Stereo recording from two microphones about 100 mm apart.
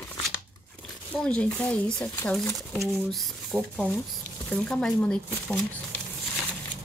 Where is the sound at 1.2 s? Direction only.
15° left (ahead or behind).